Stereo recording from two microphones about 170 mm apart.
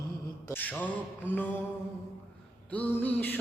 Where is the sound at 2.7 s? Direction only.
10° left (ahead or behind).